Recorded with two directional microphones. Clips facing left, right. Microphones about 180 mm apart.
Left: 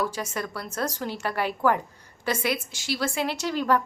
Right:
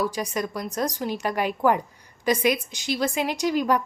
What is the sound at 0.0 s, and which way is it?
Speech, 15° right (ahead or behind).